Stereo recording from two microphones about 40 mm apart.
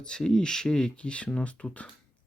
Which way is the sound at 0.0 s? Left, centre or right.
Left.